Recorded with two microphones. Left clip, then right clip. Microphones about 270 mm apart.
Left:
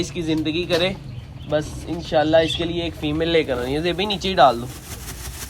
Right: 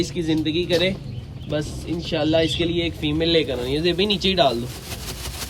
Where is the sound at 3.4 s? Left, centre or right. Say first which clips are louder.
Left 1 dB; centre.